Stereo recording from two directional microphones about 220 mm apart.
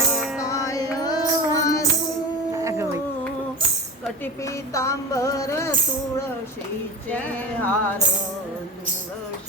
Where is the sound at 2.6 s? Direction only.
10° right (ahead or behind).